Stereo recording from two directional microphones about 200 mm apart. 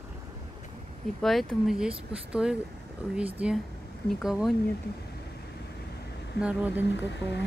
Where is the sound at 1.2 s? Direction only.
Centre (ahead or behind).